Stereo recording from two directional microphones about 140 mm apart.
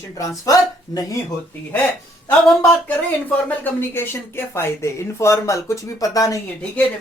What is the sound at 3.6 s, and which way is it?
Speech, 15° left (ahead or behind).